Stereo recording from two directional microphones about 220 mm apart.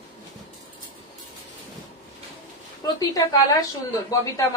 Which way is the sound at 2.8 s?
20° left (ahead or behind).